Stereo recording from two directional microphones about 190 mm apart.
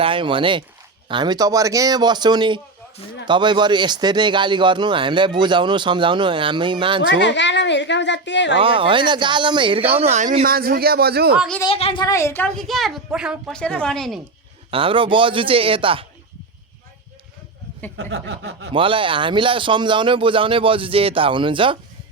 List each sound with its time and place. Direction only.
0.0 s speech: 25° right (ahead or behind)
7.1 s a woman's voice: 70° left (ahead or behind)
8.6 s speech: 25° right (ahead or behind); by 11.3 s 55° right (ahead or behind)
11.3 s a woman's voice: 5° left (ahead or behind)
11.6 s speech: 30° left (ahead or behind)
12.0 s a woman's voice: 15° left (ahead or behind)
14.7 s speech: 30° right (ahead or behind)
17.9 s a sound: 60° right (ahead or behind)
18.7 s speech: 25° right (ahead or behind)